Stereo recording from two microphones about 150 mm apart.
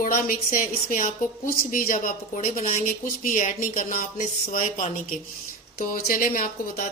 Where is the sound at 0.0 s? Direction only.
65° left (ahead or behind).